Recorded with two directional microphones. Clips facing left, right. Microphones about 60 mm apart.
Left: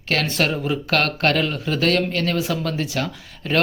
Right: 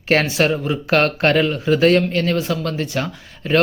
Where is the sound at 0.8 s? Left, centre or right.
Centre.